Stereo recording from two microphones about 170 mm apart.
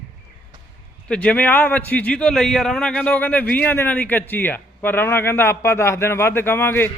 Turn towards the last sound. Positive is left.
turn(degrees=10)  # may be behind; listen again after turning